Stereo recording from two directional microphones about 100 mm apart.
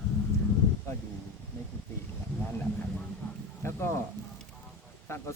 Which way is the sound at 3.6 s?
20° left (ahead or behind).